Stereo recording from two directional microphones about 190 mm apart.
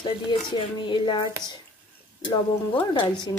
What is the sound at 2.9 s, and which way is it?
Speech, 25° left (ahead or behind).